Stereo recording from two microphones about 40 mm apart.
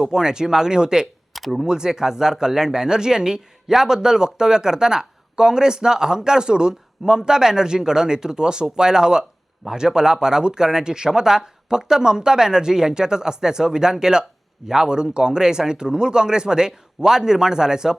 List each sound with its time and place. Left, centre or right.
0.0 s speech: centre
1.3 s a sound: centre
1.6 s speech: centre